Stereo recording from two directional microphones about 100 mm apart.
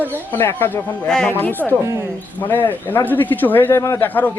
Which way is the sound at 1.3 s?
20° left (ahead or behind).